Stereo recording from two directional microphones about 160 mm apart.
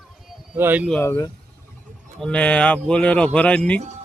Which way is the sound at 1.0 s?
20° left (ahead or behind).